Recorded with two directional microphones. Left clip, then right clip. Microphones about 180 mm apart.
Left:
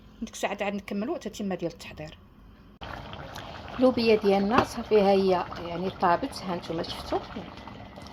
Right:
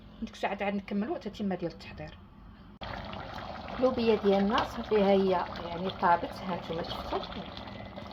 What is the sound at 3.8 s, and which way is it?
Speech, 45° left (ahead or behind).